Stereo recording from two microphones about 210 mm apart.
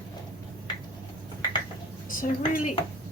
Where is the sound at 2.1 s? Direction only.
40° left (ahead or behind).